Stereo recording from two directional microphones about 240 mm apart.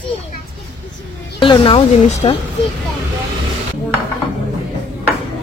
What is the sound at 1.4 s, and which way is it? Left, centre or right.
Speech, left.